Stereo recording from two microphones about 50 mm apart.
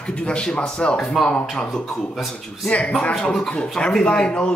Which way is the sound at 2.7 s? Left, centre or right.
Left.